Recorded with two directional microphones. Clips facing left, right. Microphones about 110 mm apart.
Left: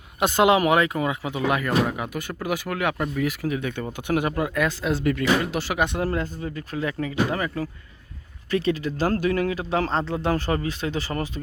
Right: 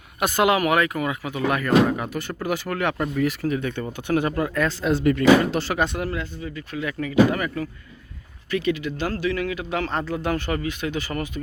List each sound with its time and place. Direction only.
0.2 s speech: 20° left (ahead or behind)
6.1 s speech: 40° left (ahead or behind)